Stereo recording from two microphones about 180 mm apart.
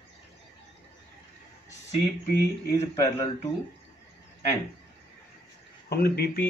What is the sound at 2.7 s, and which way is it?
Speech, 15° left (ahead or behind).